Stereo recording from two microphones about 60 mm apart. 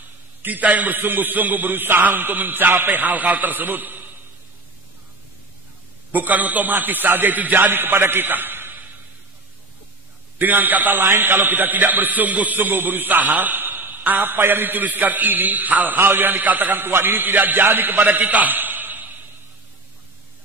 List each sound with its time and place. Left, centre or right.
0.4 s a man's voice: right
6.1 s a man's voice: right
10.4 s a man's voice: right